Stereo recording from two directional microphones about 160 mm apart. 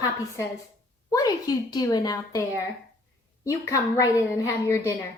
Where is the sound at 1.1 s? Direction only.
25° left (ahead or behind).